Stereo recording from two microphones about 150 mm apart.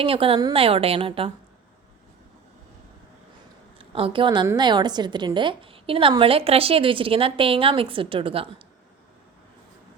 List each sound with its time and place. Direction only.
0.0 s a woman's voice: 40° right (ahead or behind)
3.8 s a woman's voice: 40° right (ahead or behind)